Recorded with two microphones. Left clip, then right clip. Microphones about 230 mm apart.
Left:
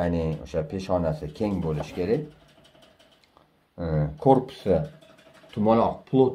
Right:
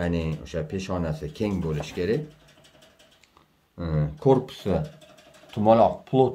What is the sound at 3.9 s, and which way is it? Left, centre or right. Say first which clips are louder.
Speech: left 1 dB; right.